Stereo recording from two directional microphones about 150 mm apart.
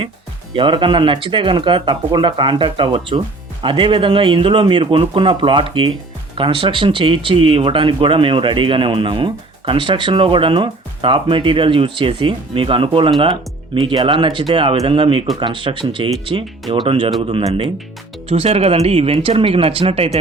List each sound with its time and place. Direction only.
0.5 s speech: 35° right (ahead or behind)
18.3 s speech: 40° right (ahead or behind)